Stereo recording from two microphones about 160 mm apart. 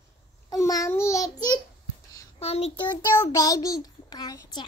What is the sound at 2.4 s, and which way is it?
A child's voice, 40° left (ahead or behind).